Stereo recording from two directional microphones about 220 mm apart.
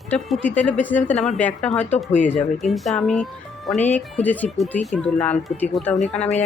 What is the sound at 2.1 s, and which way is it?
Speech, 35° left (ahead or behind).